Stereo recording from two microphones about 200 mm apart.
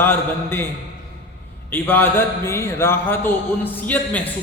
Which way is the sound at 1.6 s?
10° left (ahead or behind).